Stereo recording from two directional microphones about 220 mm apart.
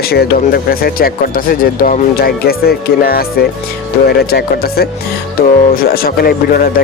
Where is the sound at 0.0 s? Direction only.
45° left (ahead or behind).